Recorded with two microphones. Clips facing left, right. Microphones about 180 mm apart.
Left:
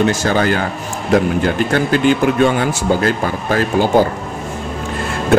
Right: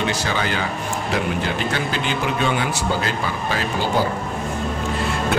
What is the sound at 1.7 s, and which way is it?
Speech, 50° left (ahead or behind).